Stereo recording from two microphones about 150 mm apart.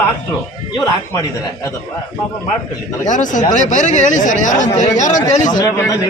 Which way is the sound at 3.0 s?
55° left (ahead or behind).